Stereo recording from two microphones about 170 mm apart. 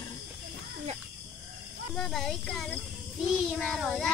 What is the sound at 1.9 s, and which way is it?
Child singing, 5° left (ahead or behind).